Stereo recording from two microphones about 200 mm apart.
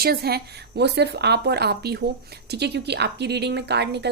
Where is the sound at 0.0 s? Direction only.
50° right (ahead or behind).